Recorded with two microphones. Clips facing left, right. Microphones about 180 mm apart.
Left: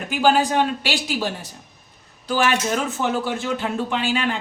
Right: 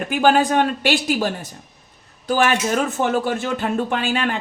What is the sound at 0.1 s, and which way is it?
Speech, 55° right (ahead or behind).